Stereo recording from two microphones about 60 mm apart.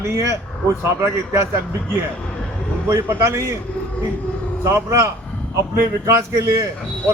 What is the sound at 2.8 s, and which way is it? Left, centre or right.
Speech, right.